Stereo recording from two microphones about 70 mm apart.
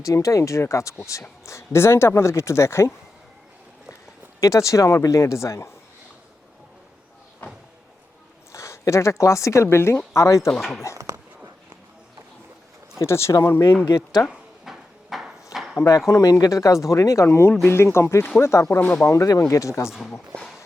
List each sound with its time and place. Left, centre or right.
0.0 s speech: left
4.4 s speech: left
8.5 s speech: left
10.6 s speech: centre
10.9 s a sound: right
13.0 s speech: left
13.8 s speech: left
14.3 s drawer open or close: centre
15.5 s a sound: left
15.9 s speech: left